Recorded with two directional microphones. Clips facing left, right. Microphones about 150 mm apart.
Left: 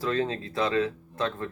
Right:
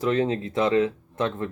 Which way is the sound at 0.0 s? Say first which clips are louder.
Right 5 dB; 20° right (ahead or behind).